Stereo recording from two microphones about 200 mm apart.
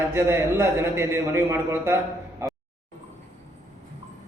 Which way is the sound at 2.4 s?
10° right (ahead or behind).